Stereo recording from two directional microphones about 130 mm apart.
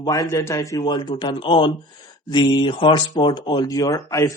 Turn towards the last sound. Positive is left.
turn(degrees=25)  # may be behind; listen again after turning